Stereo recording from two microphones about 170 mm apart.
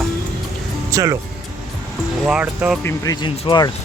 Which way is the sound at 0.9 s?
20° right (ahead or behind).